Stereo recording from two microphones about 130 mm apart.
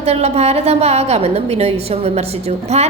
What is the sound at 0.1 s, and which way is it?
A woman's voice, 55° right (ahead or behind).